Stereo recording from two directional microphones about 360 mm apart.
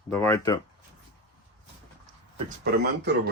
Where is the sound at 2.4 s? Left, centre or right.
Right.